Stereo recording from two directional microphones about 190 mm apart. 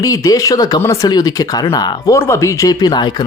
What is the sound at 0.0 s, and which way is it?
Speech, 20° left (ahead or behind).